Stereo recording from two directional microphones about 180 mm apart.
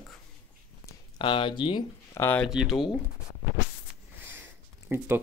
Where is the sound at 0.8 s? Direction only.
25° left (ahead or behind).